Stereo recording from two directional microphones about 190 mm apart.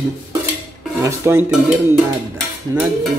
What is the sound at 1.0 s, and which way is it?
Speech, 15° right (ahead or behind).